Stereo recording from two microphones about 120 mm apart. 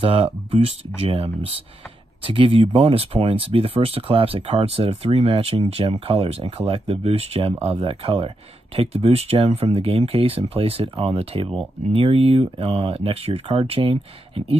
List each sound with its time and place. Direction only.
0.0 s speech: 55° right (ahead or behind)